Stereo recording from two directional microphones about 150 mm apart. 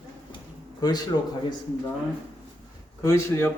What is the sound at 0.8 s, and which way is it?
Speech, 30° left (ahead or behind).